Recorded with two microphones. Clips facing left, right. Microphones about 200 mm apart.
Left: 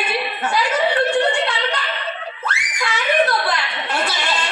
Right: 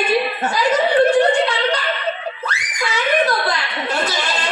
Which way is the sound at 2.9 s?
40° right (ahead or behind).